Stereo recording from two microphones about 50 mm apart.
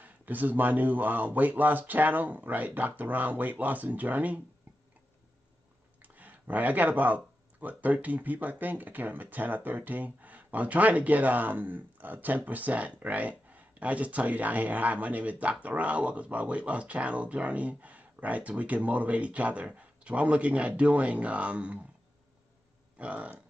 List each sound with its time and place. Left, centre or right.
0.0 s speech: right
6.0 s speech: right
22.9 s burping: right